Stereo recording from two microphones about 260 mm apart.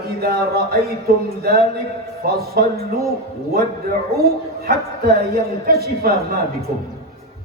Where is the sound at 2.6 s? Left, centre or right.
Right.